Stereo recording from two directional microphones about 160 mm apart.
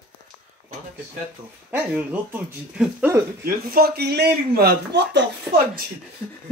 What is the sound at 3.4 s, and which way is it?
Speech, 70° right (ahead or behind).